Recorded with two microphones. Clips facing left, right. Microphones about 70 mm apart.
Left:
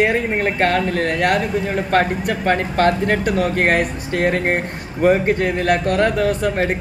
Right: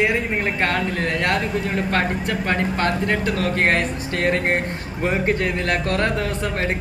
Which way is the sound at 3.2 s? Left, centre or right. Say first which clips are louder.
Left 3 dB; left.